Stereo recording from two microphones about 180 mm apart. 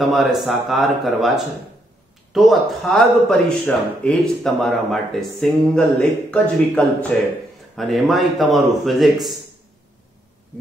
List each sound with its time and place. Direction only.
0.0 s a man's voice: centre (ahead or behind)